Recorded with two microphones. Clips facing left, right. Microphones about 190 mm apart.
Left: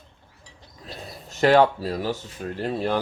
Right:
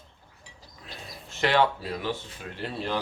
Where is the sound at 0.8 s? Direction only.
40° left (ahead or behind).